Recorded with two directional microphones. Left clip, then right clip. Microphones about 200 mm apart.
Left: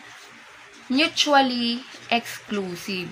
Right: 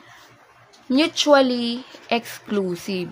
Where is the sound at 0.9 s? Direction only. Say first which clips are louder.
Right 3 dB; 60° right (ahead or behind).